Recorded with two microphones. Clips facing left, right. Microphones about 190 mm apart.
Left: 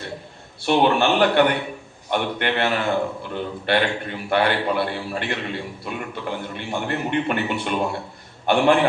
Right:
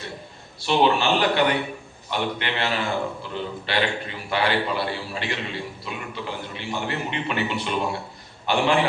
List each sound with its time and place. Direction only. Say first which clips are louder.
0.6 s a man's voice: left 2 dB; 55° left (ahead or behind)